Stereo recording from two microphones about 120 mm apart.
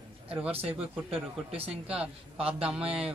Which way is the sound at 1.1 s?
55° right (ahead or behind).